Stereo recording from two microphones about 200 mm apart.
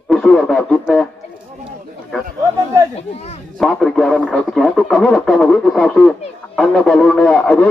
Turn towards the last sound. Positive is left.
turn(degrees=5)  # may be behind; listen again after turning